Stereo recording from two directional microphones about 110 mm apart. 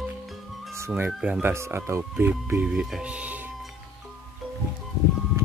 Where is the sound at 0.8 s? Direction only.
20° right (ahead or behind).